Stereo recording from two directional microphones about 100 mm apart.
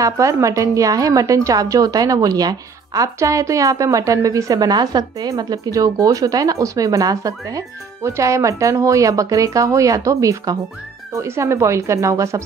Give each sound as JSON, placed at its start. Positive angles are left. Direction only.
{"t": 0.0, "sound": "a woman's voice", "side_deg": -30}